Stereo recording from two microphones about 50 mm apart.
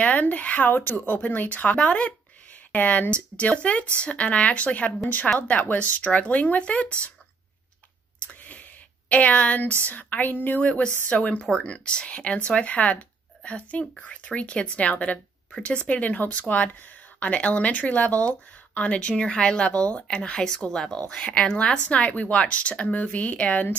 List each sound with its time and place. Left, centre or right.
0.0 s speech: left
5.3 s speech: centre
5.7 s speech: left
8.3 s a sound: left
9.1 s speech: left
11.1 s speech: left